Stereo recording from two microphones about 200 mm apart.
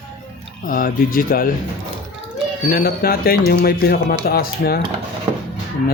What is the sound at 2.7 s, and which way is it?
Speech, 50° left (ahead or behind).